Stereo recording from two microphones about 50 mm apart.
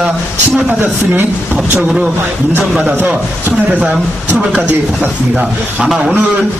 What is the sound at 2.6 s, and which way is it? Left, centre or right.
Speech, centre.